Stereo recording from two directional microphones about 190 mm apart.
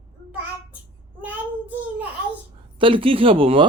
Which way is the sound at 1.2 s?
10° right (ahead or behind).